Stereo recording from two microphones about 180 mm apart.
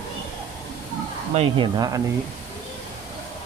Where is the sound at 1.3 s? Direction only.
35° right (ahead or behind).